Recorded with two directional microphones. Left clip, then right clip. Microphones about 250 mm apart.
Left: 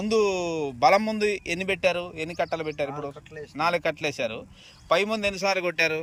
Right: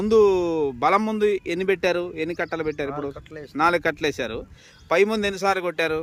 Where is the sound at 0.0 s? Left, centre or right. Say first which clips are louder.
Right 6 dB; centre.